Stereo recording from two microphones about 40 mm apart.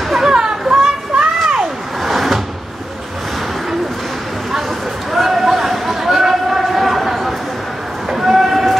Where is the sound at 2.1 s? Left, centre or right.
Centre.